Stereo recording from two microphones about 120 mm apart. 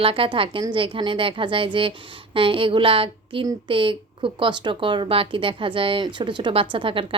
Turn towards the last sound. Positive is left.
turn(degrees=-45)  # may be behind; listen again after turning